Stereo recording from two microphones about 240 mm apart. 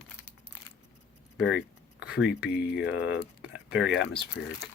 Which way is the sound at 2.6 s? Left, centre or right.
Left.